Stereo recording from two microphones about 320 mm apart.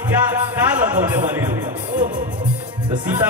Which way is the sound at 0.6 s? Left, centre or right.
Centre.